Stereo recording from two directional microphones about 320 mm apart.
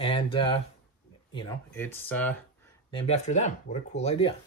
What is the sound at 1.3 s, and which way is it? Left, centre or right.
Speech, centre.